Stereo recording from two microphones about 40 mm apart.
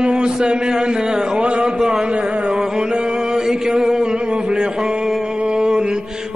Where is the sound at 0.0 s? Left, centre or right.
Right.